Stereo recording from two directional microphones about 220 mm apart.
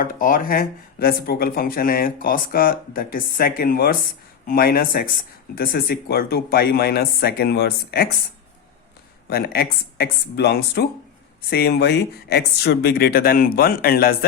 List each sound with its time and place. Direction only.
0.0 s speech: 40° left (ahead or behind)
9.3 s speech: 45° left (ahead or behind)